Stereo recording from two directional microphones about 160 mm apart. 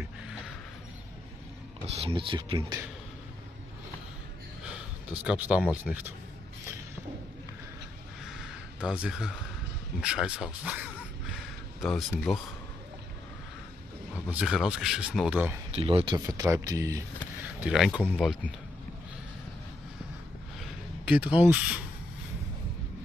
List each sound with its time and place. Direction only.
1.9 s speech: 35° right (ahead or behind)
4.6 s a sound: 5° right (ahead or behind)
5.9 s speech: 5° right (ahead or behind)
8.7 s speech: 5° right (ahead or behind)
11.3 s a sound: centre (ahead or behind)
14.3 s speech: 5° right (ahead or behind)
15.7 s speech: 35° right (ahead or behind)
16.3 s speech: 20° right (ahead or behind)
17.6 s speech: 5° right (ahead or behind)
21.1 s speech: 5° right (ahead or behind)